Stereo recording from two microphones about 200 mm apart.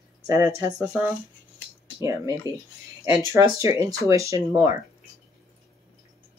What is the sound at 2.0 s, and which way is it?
Speech, 15° right (ahead or behind).